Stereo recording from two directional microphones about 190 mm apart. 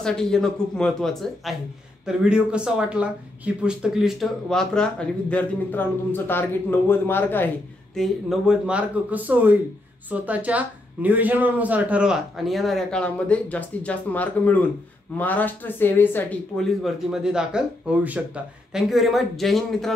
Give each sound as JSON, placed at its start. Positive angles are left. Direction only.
{"t": 0.0, "sound": "speech", "side_deg": 5}
{"t": 7.9, "sound": "speech", "side_deg": 0}